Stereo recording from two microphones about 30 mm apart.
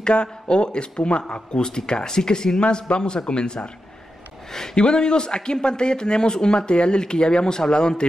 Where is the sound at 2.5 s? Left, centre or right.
Left.